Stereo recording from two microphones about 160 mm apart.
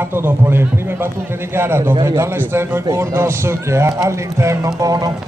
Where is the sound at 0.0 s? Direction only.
15° right (ahead or behind).